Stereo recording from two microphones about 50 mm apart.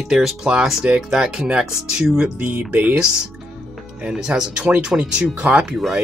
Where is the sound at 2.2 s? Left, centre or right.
Right.